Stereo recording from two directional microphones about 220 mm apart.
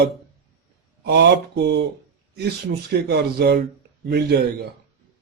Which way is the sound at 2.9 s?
45° right (ahead or behind).